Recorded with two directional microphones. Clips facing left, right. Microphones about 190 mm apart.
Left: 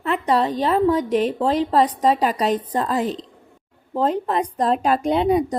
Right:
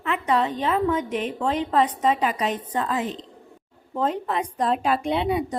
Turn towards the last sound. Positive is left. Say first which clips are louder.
# left 5 dB
turn(degrees=40)  # may be behind; listen again after turning